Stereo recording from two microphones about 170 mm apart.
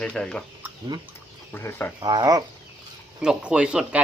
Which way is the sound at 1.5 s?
15° left (ahead or behind).